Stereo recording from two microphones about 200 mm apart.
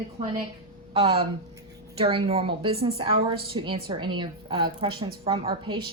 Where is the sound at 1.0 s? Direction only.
30° right (ahead or behind).